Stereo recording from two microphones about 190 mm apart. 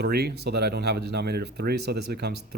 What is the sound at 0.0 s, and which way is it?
Speech, 60° right (ahead or behind).